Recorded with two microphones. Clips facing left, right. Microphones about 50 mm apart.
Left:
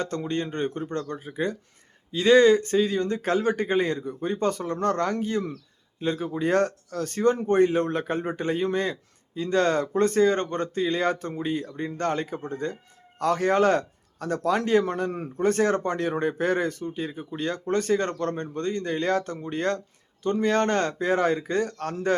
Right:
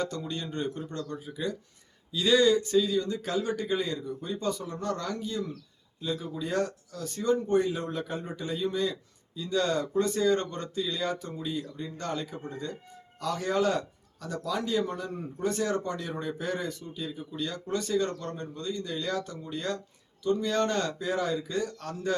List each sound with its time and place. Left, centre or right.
0.0 s a man's voice: left